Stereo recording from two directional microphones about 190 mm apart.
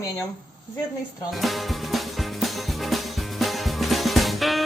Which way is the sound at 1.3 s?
Centre (ahead or behind).